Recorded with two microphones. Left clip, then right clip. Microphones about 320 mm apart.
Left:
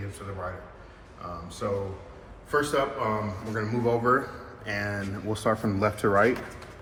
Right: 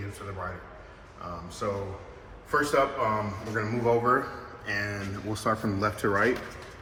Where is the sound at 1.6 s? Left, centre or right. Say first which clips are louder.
Left 2 dB; centre.